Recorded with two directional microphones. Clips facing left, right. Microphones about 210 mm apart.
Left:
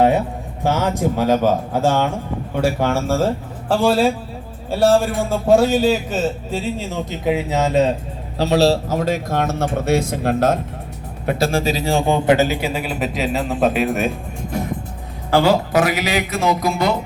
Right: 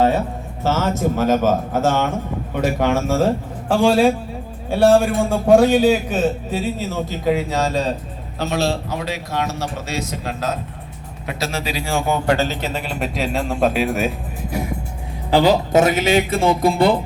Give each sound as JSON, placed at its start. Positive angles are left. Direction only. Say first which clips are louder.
{"t": 0.6, "sound": "a man's voice", "louder": "left 1 dB", "side_deg": 15}
{"t": 2.8, "sound": "a man's voice", "louder": "right 4 dB", "side_deg": -10}
{"t": 6.9, "sound": "speech", "louder": "right 1 dB", "side_deg": 20}
{"t": 8.4, "sound": "a man's voice", "louder": "left 6 dB", "side_deg": 35}
{"t": 11.9, "sound": "a man's voice", "louder": "left 2 dB", "side_deg": 30}